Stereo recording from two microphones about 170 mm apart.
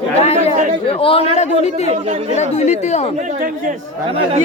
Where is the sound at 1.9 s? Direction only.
40° right (ahead or behind).